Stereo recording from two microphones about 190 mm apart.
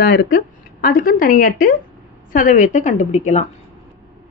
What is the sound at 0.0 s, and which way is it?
A woman's voice, 60° left (ahead or behind).